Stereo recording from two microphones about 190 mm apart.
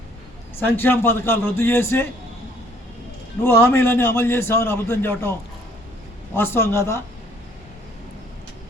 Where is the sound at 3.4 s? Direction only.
10° left (ahead or behind).